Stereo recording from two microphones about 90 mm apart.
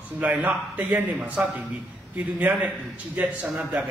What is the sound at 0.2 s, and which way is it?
A man's voice, 15° right (ahead or behind).